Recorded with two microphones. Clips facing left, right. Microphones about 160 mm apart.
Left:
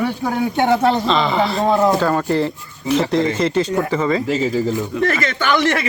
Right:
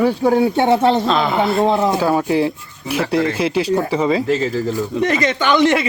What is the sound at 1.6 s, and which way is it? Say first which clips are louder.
Speech: even; 20° right (ahead or behind).